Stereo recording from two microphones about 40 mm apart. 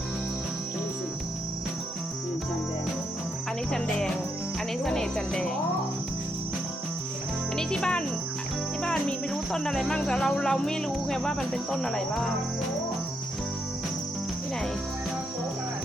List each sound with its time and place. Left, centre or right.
4.9 s speech: centre
7.5 s music: centre
9.3 s speech: centre